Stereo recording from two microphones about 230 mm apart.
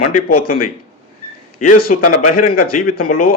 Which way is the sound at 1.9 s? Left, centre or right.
Left.